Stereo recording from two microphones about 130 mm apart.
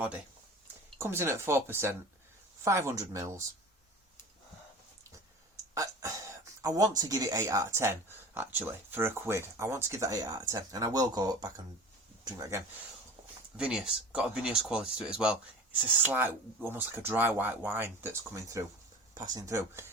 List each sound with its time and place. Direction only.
0.9 s speech: 20° right (ahead or behind)
5.7 s a sound: 25° right (ahead or behind)
7.0 s speech: 30° right (ahead or behind)
13.6 s speech: 5° right (ahead or behind); by 19.8 s 25° right (ahead or behind)